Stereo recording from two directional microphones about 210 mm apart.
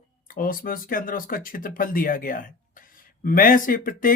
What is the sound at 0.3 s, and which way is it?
Speech, 40° left (ahead or behind).